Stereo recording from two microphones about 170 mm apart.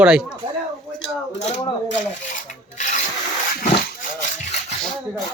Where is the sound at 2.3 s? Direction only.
45° left (ahead or behind).